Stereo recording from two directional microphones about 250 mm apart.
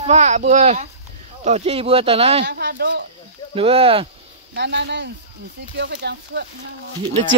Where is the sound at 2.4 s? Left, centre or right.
Right.